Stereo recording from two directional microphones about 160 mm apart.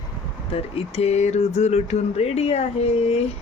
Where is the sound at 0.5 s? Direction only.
40° left (ahead or behind).